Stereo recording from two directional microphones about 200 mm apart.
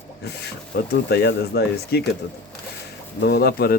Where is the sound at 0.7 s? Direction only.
55° left (ahead or behind).